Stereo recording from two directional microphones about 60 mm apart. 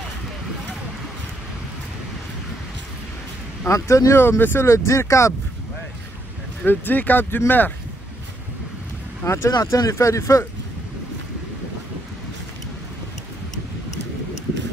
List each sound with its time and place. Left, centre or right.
3.6 s speech: left
4.2 s speech: left
4.6 s speech: left
6.6 s speech: left
9.2 s speech: left
9.6 s speech: left